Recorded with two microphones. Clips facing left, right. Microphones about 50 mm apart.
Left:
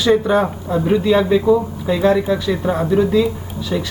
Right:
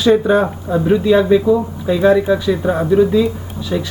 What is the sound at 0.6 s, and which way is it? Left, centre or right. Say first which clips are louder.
Speech: right 2 dB; centre.